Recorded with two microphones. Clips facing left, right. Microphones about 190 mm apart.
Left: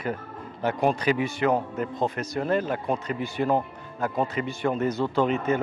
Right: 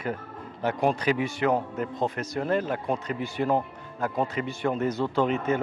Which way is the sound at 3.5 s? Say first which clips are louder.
Left 1 dB; 20° left (ahead or behind).